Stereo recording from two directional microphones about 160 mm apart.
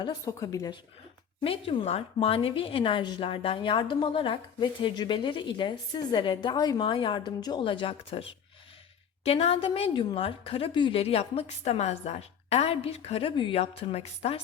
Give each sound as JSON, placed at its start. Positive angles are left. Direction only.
{"t": 0.0, "sound": "speech", "side_deg": 20}
{"t": 1.4, "sound": "speech", "side_deg": 35}
{"t": 9.2, "sound": "speech", "side_deg": 40}